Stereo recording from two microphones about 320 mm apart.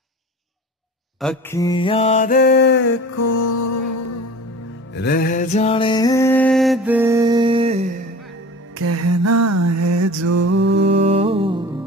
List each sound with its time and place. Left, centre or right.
1.2 s mantra: centre; by 3.0 s left
3.2 s music: left
4.9 s music: left; by 7.8 s centre
8.7 s mantra: right
10.4 s mantra: right
11.1 s music: centre